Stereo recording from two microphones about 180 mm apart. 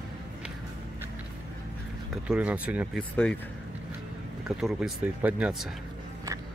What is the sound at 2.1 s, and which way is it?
Speech, 5° right (ahead or behind).